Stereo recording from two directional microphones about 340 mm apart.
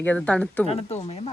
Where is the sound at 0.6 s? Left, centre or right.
Centre.